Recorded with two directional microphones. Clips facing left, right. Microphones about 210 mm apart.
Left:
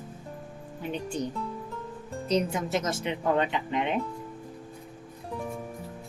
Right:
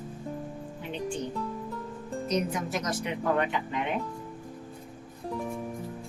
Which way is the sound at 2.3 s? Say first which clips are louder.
Left 3 dB; 30° left (ahead or behind).